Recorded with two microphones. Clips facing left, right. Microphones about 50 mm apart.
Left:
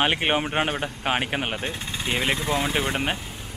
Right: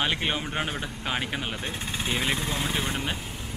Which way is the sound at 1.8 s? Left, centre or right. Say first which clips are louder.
Even; centre.